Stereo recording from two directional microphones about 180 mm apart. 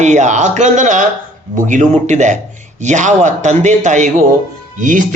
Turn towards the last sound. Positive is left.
turn(degrees=-45)  # may be behind; listen again after turning